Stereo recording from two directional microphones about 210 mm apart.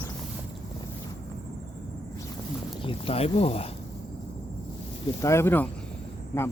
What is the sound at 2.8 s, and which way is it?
Speech, 25° left (ahead or behind).